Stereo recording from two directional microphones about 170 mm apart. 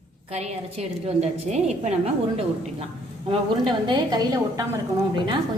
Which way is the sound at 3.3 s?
30° right (ahead or behind).